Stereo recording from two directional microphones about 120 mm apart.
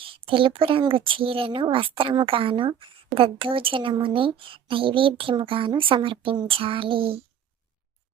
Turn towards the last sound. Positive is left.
turn(degrees=-50)  # may be behind; listen again after turning